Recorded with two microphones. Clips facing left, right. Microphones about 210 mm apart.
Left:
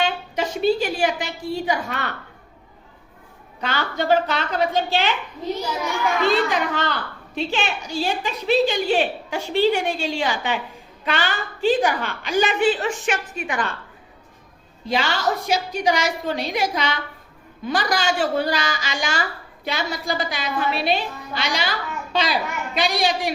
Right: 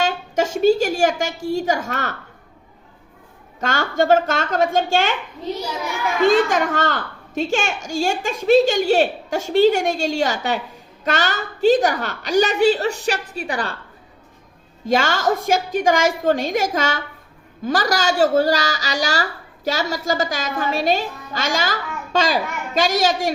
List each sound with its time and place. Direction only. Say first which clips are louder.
0.0 s a woman's voice: right 3 dB; 45° right (ahead or behind)
3.6 s a woman's voice: right 5 dB; 45° right (ahead or behind)
6.2 s a woman's voice: right 7 dB; 45° right (ahead or behind)
14.8 s a woman's voice: right 4 dB; 45° right (ahead or behind)